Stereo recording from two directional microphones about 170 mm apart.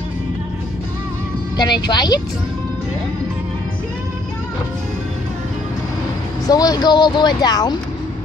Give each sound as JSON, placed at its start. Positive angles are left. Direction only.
{"t": 1.6, "sound": "speech", "side_deg": 25}
{"t": 6.4, "sound": "speech", "side_deg": 20}